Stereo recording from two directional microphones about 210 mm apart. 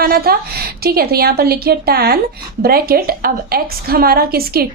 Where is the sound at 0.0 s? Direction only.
45° right (ahead or behind).